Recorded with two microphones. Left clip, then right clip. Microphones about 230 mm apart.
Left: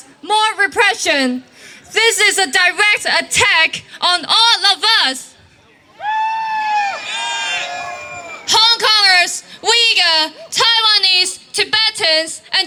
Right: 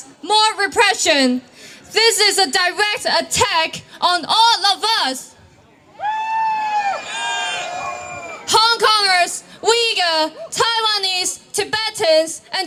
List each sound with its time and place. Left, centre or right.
0.3 s a woman's voice: centre
1.9 s speech: centre; by 5.2 s right
6.0 s a sound: right